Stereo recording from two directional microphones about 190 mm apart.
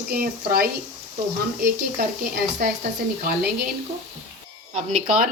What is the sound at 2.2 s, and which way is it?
Speech, 50° right (ahead or behind).